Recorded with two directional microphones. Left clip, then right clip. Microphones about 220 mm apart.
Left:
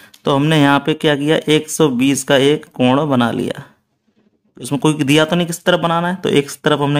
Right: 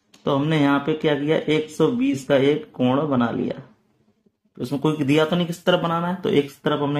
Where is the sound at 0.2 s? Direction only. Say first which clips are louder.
Left 7 dB; 40° left (ahead or behind).